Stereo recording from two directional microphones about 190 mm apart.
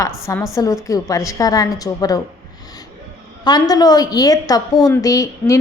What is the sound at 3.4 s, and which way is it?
A woman's voice, 20° left (ahead or behind).